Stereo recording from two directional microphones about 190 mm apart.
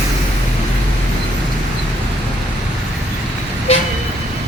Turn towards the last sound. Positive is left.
turn(degrees=35)  # may be behind; listen again after turning